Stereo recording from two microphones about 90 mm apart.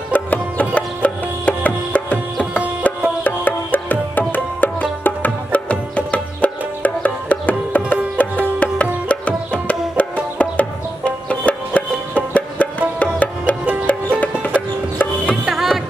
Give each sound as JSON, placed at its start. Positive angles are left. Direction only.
{"t": 0.1, "sound": "music", "side_deg": 15}
{"t": 15.4, "sound": "music", "side_deg": -5}